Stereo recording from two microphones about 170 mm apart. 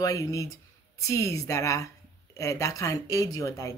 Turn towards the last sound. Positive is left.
turn(degrees=20)  # may be behind; listen again after turning